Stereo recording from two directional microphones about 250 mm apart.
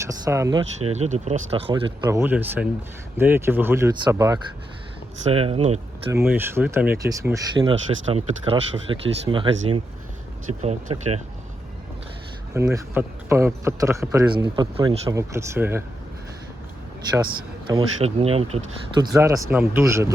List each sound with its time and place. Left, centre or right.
0.1 s speech: centre
0.9 s speech: right
6.1 s speech: centre; by 11.2 s right
12.5 s speech: centre
17.7 s speech: right